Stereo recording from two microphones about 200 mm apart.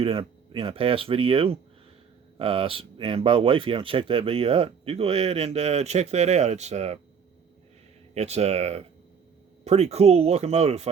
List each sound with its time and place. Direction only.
0.0 s speech: 30° right (ahead or behind)
8.1 s speech: 35° right (ahead or behind)